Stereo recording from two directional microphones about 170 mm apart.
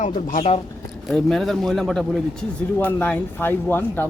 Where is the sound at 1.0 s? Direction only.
Centre (ahead or behind).